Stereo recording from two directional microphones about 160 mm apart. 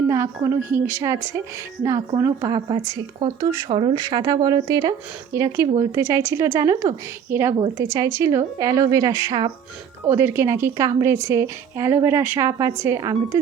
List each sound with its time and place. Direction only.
0.1 s a woman's voice: 15° right (ahead or behind)
3.4 s a woman's voice: 20° right (ahead or behind)
3.7 s speech: 35° right (ahead or behind)
3.9 s a woman's voice: 20° right (ahead or behind)